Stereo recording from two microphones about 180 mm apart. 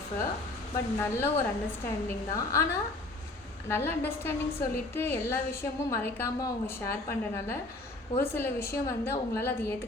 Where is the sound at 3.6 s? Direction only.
15° left (ahead or behind).